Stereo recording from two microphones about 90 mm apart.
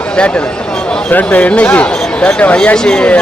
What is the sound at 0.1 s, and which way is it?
Speech, 10° left (ahead or behind).